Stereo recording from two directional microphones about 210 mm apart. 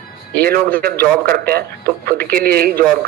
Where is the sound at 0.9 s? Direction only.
10° left (ahead or behind).